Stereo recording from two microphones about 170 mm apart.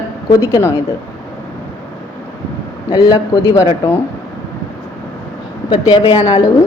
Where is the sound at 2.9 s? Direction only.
20° left (ahead or behind).